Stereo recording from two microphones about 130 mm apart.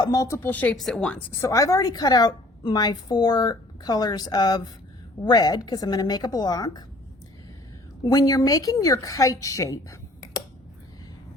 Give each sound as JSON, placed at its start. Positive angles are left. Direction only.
{"t": 0.0, "sound": "speech", "side_deg": 30}
{"t": 1.4, "sound": "a woman's voice", "side_deg": 25}
{"t": 8.0, "sound": "speech", "side_deg": 25}